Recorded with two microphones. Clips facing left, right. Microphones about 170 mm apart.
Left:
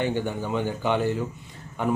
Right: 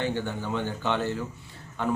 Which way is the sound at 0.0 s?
15° left (ahead or behind).